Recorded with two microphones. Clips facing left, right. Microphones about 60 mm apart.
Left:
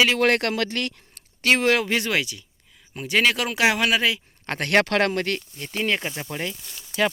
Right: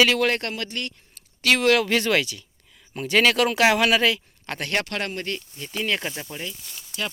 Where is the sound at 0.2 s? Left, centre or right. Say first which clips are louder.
Left 3 dB; left.